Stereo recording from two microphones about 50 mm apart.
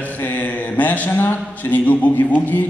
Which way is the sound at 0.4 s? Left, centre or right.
Left.